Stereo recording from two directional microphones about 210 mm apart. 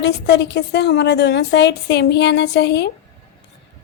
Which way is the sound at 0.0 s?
55° left (ahead or behind).